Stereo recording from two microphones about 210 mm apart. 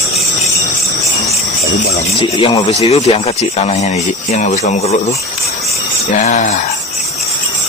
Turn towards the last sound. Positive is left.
turn(degrees=35)  # may be behind; listen again after turning